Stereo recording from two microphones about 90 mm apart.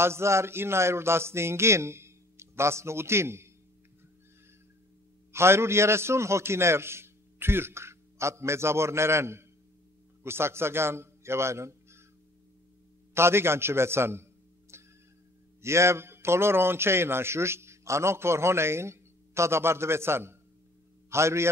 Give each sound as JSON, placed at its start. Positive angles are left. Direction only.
{"t": 0.0, "sound": "a man's voice", "side_deg": -30}
{"t": 5.3, "sound": "a man's voice", "side_deg": -30}
{"t": 13.1, "sound": "a man's voice", "side_deg": -30}
{"t": 14.7, "sound": "neigh", "side_deg": -30}
{"t": 15.6, "sound": "a man's voice", "side_deg": -30}